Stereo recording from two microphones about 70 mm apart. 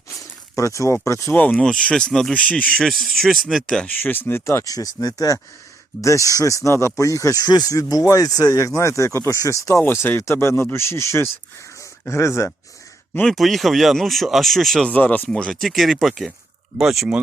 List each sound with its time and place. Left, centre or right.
0.5 s speech: left
1.3 s speech: left; by 3.8 s centre
3.8 s speech: left
4.4 s speech: left
6.0 s speech: left
13.2 s speech: centre
14.8 s speech: centre
15.6 s speech: centre